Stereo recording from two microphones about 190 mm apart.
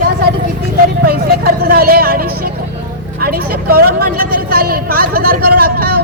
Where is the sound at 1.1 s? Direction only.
50° right (ahead or behind).